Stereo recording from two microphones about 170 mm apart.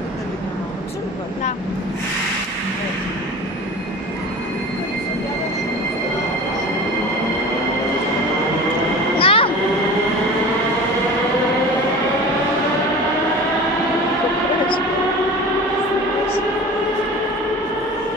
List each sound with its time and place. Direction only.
9.1 s vehicle: 30° left (ahead or behind)